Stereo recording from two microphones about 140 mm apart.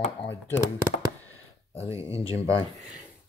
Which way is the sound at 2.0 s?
45° left (ahead or behind).